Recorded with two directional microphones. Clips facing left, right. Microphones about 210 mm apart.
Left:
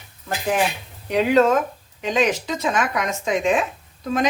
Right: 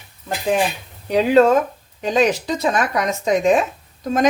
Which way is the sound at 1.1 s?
30° right (ahead or behind).